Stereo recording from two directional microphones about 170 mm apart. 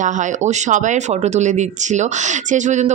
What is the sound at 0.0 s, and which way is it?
Speech, 45° right (ahead or behind).